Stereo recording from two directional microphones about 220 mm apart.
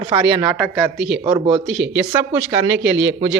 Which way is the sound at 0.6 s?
5° right (ahead or behind).